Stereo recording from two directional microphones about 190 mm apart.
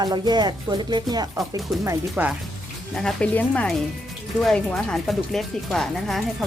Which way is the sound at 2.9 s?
5° left (ahead or behind).